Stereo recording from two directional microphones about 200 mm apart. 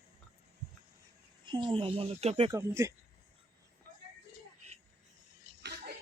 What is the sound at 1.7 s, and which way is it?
Speech, 25° right (ahead or behind).